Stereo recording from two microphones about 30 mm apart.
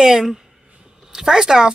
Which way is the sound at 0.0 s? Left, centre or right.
Centre.